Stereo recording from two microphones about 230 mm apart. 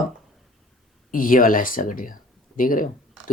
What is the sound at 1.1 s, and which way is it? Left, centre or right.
Speech, left.